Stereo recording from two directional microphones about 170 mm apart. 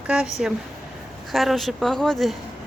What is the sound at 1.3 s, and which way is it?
Speech, centre (ahead or behind).